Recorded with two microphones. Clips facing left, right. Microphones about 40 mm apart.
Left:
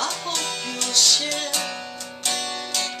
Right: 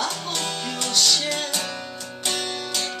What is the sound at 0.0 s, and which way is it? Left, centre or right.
Music, centre.